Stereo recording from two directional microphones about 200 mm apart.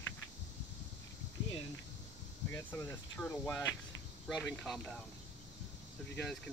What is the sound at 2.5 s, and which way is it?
Speech, 10° left (ahead or behind).